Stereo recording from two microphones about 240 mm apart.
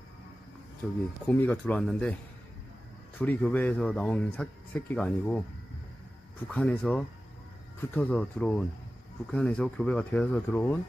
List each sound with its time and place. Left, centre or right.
0.8 s speech: centre
3.2 s speech: centre
6.5 s speech: centre